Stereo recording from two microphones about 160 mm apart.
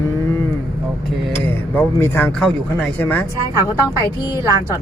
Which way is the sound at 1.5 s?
15° left (ahead or behind).